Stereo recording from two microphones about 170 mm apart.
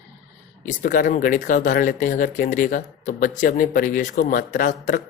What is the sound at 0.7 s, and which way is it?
Speech, 55° left (ahead or behind).